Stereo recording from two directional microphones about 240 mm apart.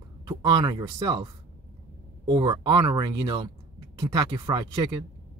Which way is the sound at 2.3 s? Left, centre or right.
Centre.